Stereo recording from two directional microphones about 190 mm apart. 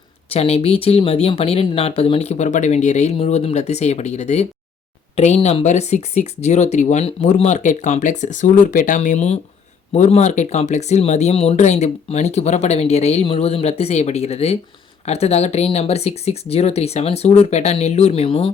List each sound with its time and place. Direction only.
0.3 s speech: 30° left (ahead or behind)